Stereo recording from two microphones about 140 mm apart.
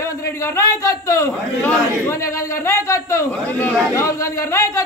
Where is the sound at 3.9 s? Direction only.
20° left (ahead or behind).